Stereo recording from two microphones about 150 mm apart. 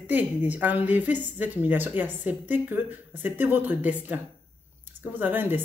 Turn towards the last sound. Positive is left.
turn(degrees=-15)  # may be behind; listen again after turning